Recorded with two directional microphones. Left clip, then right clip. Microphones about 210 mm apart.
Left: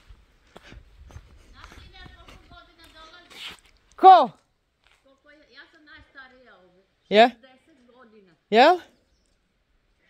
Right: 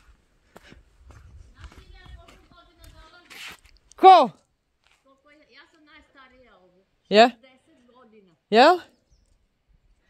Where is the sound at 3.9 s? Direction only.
30° right (ahead or behind).